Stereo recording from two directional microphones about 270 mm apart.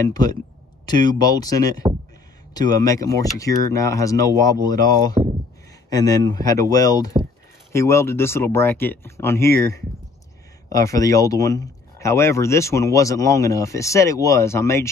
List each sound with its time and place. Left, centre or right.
0.1 s speech: centre
5.2 s a sound: right
5.9 s speech: centre
10.7 s speech: centre